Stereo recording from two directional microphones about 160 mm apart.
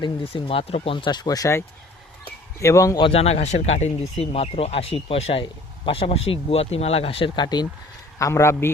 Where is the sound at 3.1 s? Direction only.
40° left (ahead or behind).